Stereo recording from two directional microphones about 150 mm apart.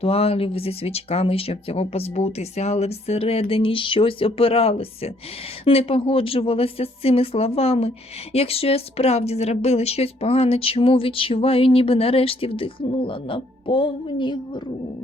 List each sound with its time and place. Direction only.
0.0 s a woman's voice: 40° left (ahead or behind)